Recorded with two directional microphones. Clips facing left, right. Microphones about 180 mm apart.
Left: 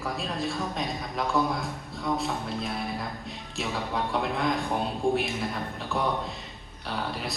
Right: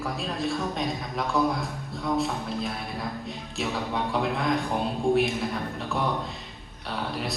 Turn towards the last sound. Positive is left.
turn(degrees=0)  # may be behind; listen again after turning